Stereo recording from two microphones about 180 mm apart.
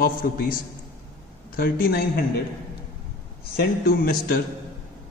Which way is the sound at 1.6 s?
60° left (ahead or behind).